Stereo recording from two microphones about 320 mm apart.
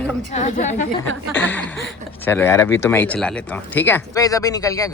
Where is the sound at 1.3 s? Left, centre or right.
Centre.